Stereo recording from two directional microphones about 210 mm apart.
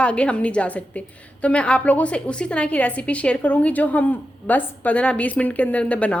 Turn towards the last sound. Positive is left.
turn(degrees=5)  # may be behind; listen again after turning